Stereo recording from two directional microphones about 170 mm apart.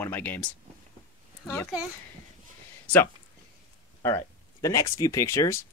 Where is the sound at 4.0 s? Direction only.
15° left (ahead or behind).